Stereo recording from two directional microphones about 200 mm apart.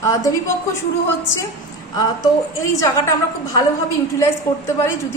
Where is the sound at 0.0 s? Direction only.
15° left (ahead or behind).